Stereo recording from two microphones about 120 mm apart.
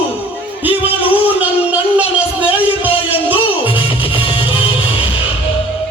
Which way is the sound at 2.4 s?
15° right (ahead or behind).